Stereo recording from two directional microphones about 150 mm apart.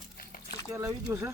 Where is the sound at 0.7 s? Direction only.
20° right (ahead or behind).